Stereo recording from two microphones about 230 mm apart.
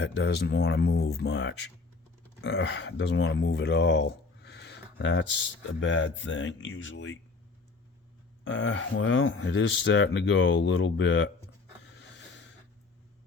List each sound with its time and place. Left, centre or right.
0.0 s speech: left
8.4 s speech: left